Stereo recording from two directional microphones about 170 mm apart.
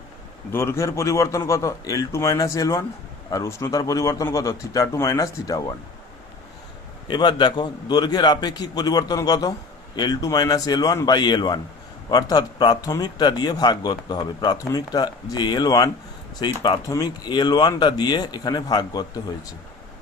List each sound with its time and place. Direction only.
0.5 s a man's voice: 15° left (ahead or behind)
7.1 s a man's voice: 25° left (ahead or behind)